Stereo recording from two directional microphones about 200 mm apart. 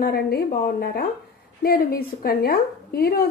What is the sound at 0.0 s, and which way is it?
A woman's voice, 50° left (ahead or behind).